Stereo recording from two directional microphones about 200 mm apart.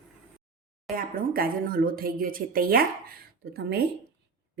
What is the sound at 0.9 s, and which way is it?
Speech, 45° right (ahead or behind).